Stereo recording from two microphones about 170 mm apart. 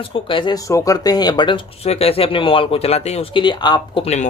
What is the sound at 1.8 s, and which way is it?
Speech, 35° left (ahead or behind).